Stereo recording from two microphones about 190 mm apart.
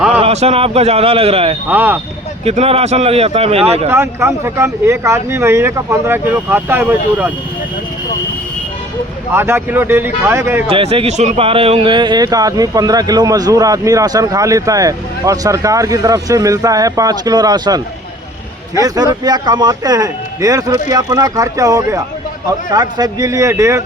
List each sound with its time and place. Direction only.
0.2 s speech: 30° right (ahead or behind)
1.7 s speech: 10° right (ahead or behind)
2.4 s speech: 30° right (ahead or behind)
3.8 s speech: 10° right (ahead or behind)
9.3 s speech: 10° right (ahead or behind)
10.7 s speech: 30° right (ahead or behind)